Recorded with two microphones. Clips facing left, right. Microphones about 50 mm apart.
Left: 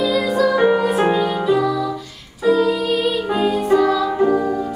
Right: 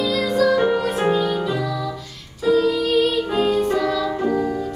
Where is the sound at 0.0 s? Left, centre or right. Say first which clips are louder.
Left 2 dB; centre.